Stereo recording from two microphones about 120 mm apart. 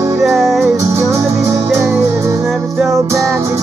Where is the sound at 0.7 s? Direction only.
25° right (ahead or behind).